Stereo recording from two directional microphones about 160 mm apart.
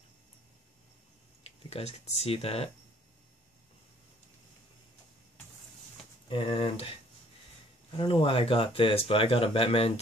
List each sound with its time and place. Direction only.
1.4 s speech: 40° left (ahead or behind)
6.2 s speech: 30° left (ahead or behind)